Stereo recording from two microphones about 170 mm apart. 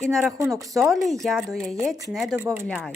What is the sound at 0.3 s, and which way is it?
Speech, 20° right (ahead or behind).